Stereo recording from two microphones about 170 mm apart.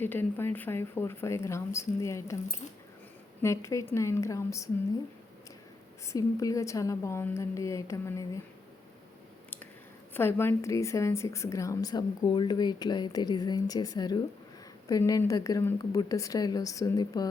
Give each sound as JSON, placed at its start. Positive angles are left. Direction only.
{"t": 0.0, "sound": "speech", "side_deg": 10}
{"t": 3.4, "sound": "speech", "side_deg": 15}
{"t": 6.1, "sound": "speech", "side_deg": 20}
{"t": 10.2, "sound": "a woman's voice", "side_deg": 15}